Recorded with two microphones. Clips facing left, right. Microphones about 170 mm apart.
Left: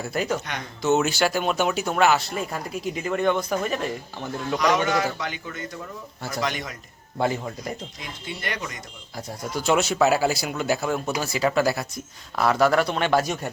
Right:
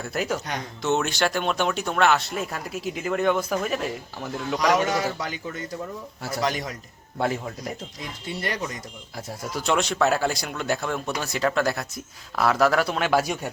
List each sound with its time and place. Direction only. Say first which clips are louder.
0.0 s speech: left 1 dB; centre (ahead or behind)
4.9 s speech: left 1 dB; 35° right (ahead or behind)
6.4 s speech: right 2 dB; 35° right (ahead or behind)
7.2 s speech: left 1 dB; centre (ahead or behind)
8.3 s speech: right 3 dB; 35° right (ahead or behind)
9.1 s speech: left 2 dB; centre (ahead or behind)